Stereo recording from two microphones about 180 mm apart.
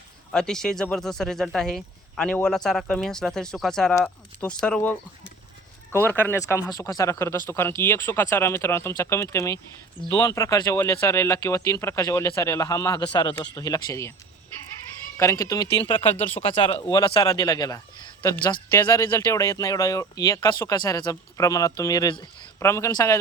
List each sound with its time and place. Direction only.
0.3 s speech: 5° left (ahead or behind); by 14.1 s 20° left (ahead or behind)
15.2 s speech: 15° left (ahead or behind)